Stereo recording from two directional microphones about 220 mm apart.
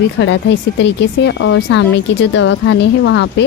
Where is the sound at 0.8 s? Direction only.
55° left (ahead or behind).